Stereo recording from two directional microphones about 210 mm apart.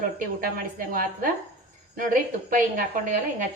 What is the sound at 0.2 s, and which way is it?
A woman's voice, 40° right (ahead or behind).